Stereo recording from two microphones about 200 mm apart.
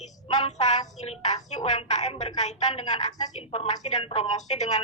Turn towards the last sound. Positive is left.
turn(degrees=35)  # may be behind; listen again after turning